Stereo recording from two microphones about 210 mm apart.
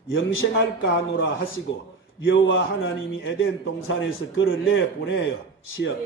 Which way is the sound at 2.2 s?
60° left (ahead or behind).